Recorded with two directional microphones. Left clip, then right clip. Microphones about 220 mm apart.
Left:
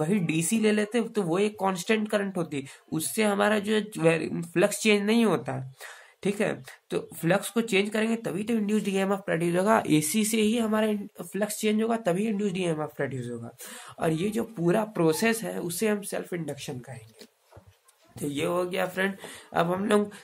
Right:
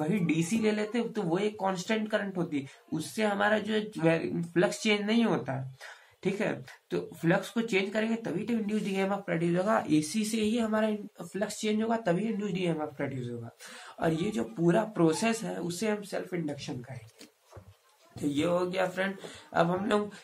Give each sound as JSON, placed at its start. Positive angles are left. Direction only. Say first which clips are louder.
{"t": 0.0, "sound": "speech", "louder": "left 2 dB", "side_deg": 50}
{"t": 18.2, "sound": "speech", "louder": "left 1 dB", "side_deg": 45}